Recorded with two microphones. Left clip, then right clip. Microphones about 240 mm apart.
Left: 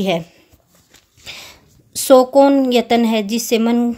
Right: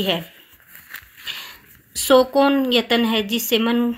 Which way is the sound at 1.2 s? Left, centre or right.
Left.